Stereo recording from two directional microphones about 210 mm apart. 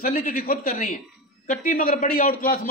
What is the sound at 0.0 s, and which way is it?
A man's voice, 40° left (ahead or behind).